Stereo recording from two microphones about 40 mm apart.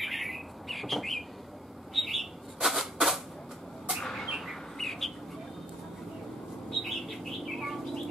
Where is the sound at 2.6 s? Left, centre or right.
Centre.